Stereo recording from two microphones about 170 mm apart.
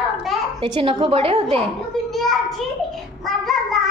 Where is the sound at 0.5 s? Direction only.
30° right (ahead or behind).